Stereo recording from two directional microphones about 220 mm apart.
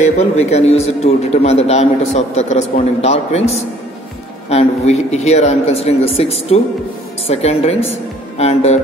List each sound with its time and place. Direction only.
0.0 s a man's voice: 30° left (ahead or behind)